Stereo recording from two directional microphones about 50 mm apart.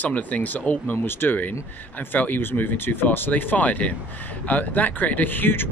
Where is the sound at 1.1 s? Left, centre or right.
Left.